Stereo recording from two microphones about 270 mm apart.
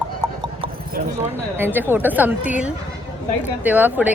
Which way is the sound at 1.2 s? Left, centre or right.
Centre.